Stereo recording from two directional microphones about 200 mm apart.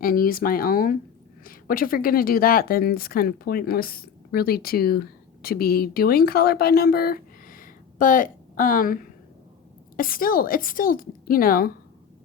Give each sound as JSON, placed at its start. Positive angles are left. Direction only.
{"t": 0.0, "sound": "a woman's voice", "side_deg": 45}
{"t": 10.0, "sound": "a woman's voice", "side_deg": 45}